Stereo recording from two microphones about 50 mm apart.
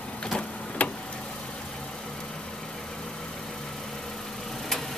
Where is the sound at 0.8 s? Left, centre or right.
Left.